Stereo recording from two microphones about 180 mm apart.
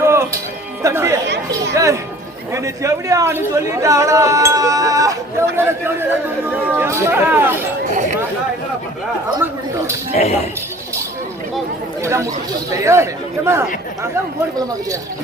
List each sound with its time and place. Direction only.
0.0 s music: 15° right (ahead or behind)
0.8 s speech: 15° right (ahead or behind)
10.1 s a man's voice: 40° left (ahead or behind)
12.0 s speech: 15° right (ahead or behind)